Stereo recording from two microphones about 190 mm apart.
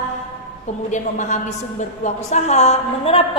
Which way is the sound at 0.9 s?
40° left (ahead or behind).